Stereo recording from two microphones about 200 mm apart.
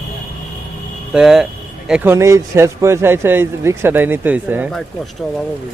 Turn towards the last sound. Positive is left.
turn(degrees=-5)  # may be behind; listen again after turning